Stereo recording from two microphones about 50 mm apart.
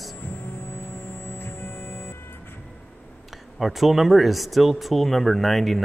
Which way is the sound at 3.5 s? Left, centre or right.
Centre.